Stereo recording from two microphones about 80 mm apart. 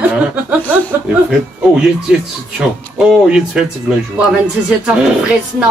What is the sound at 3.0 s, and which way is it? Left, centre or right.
Speech, centre.